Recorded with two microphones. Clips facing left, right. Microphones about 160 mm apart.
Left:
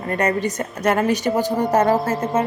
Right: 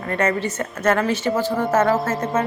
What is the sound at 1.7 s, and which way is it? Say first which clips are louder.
Speech: left 1 dB; 30° left (ahead or behind).